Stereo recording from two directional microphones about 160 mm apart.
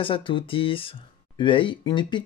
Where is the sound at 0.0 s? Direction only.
30° left (ahead or behind).